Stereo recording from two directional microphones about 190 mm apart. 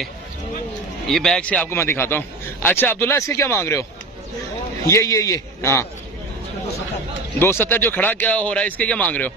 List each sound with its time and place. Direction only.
1.0 s a man's voice: centre (ahead or behind)
4.8 s a man's voice: 15° left (ahead or behind)
7.3 s a man's voice: 10° left (ahead or behind)